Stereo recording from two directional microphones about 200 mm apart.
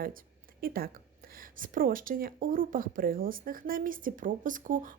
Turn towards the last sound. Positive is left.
turn(degrees=-40)  # may be behind; listen again after turning